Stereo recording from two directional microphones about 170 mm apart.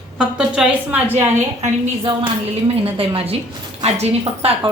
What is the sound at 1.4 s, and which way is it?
A woman's voice, 35° right (ahead or behind).